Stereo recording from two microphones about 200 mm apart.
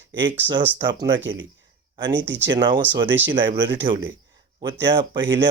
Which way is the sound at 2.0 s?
25° right (ahead or behind).